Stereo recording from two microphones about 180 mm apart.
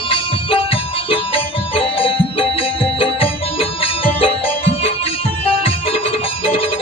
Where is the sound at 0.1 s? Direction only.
30° left (ahead or behind).